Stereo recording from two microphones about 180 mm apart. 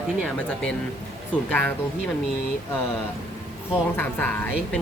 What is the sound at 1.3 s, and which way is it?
Speech, 10° left (ahead or behind).